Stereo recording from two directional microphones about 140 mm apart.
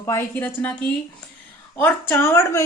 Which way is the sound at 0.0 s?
15° left (ahead or behind).